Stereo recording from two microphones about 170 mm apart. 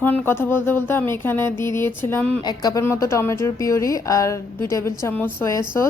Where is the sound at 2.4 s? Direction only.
25° left (ahead or behind).